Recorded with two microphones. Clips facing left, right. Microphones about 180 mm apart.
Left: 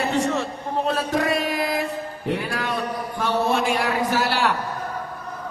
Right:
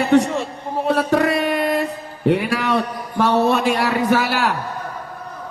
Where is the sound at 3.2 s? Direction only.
70° right (ahead or behind).